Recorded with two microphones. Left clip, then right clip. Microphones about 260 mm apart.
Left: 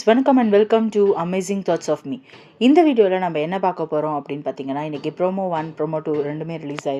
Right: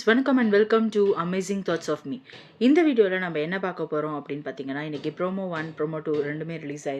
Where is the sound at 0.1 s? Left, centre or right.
Centre.